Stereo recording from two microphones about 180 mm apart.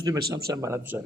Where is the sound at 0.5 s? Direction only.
15° right (ahead or behind).